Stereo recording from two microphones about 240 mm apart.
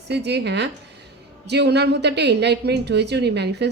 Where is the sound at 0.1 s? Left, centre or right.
Right.